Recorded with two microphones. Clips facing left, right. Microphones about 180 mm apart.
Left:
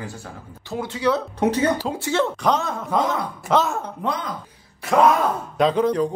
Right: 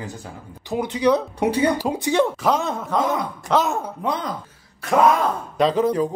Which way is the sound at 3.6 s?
20° right (ahead or behind).